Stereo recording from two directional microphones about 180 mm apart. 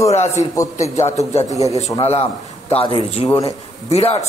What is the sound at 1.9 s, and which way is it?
A man's voice, 35° left (ahead or behind).